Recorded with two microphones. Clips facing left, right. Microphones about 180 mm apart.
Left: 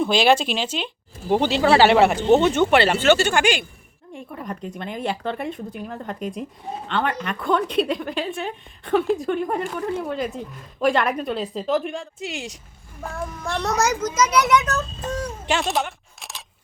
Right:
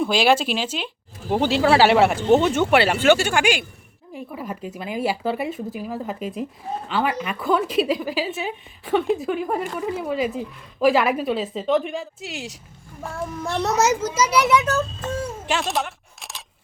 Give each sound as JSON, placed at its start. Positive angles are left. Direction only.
{"t": 0.0, "sound": "a woman's voice", "side_deg": -5}
{"t": 13.4, "sound": "a child's voice", "side_deg": -25}
{"t": 15.4, "sound": "a sound", "side_deg": 0}